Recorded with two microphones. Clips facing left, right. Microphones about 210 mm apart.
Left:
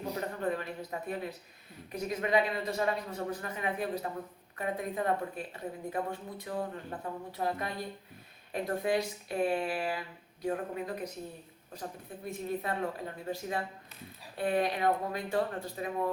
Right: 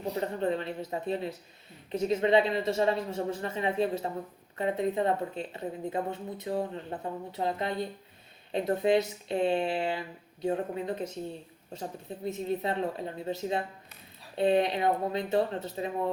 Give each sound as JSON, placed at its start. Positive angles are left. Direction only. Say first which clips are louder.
{"t": 0.2, "sound": "speech", "louder": "right 5 dB", "side_deg": -25}